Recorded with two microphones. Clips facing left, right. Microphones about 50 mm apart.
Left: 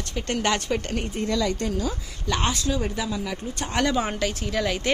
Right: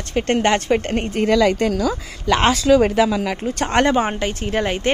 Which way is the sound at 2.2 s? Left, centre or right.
Right.